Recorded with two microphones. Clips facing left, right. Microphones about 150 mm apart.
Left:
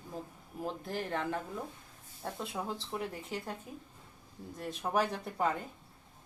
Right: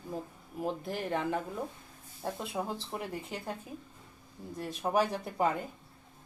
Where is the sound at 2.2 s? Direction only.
25° right (ahead or behind).